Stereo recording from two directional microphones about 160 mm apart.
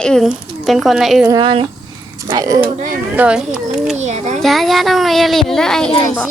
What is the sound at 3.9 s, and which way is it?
Speech, 45° right (ahead or behind).